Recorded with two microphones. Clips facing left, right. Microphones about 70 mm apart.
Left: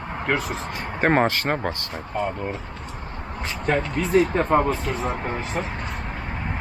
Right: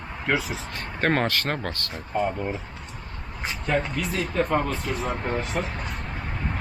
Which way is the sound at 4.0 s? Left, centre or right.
Left.